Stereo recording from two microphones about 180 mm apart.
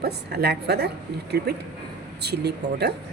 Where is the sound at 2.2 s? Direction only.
65° right (ahead or behind).